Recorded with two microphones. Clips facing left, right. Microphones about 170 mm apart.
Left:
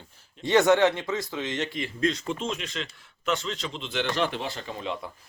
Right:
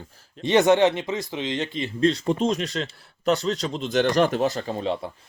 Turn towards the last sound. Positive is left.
turn(degrees=-35)  # may be behind; listen again after turning